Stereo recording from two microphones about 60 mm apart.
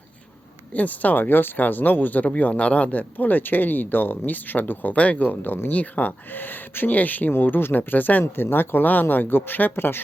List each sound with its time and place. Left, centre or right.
0.7 s speech: left